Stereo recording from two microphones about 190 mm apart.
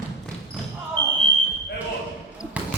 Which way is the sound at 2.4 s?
5° right (ahead or behind).